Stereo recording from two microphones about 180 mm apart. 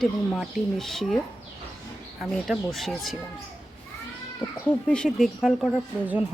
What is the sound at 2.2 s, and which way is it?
Speech, centre (ahead or behind).